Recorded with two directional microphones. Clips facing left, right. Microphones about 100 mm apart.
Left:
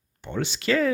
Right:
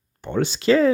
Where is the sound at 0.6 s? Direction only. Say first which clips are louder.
Right 6 dB; 25° right (ahead or behind).